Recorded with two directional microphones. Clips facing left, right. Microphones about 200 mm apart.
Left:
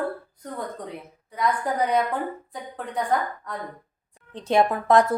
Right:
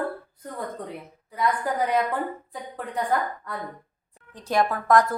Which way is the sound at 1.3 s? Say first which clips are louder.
Even; centre (ahead or behind).